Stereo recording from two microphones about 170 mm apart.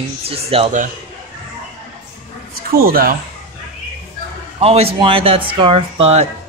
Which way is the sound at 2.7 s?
60° right (ahead or behind).